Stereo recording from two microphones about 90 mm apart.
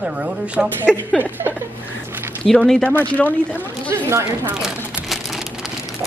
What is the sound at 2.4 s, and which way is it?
Speech, 5° left (ahead or behind).